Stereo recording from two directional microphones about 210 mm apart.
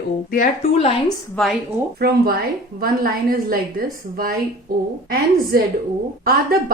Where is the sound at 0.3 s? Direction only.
40° left (ahead or behind).